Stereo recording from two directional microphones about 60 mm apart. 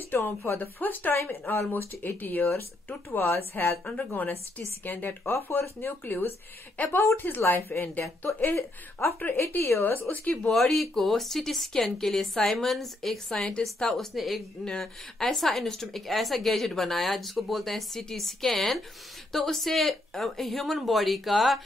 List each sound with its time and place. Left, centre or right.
0.1 s a woman's voice: left
5.2 s a woman's voice: left
10.2 s a woman's voice: left
10.5 s a woman's voice: centre
14.6 s a woman's voice: centre